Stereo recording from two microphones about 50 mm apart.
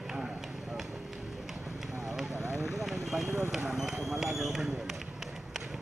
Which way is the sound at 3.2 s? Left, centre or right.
Right.